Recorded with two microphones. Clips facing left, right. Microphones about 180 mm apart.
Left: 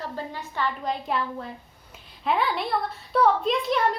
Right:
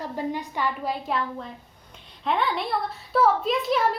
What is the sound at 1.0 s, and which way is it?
A woman's voice, centre (ahead or behind).